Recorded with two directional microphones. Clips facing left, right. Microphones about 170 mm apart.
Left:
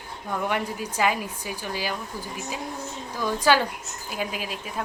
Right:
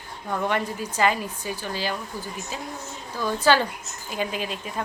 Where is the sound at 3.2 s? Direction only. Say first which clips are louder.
Right 1 dB; 10° left (ahead or behind).